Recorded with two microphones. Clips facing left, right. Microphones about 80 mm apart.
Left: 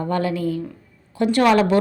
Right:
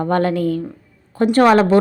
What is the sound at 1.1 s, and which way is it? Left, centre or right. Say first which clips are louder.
Speech: right 4 dB; right.